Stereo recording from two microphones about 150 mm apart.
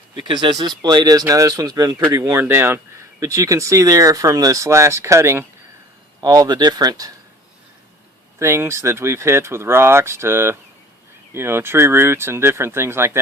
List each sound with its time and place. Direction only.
0.2 s speech: 35° right (ahead or behind)
8.4 s speech: 15° right (ahead or behind)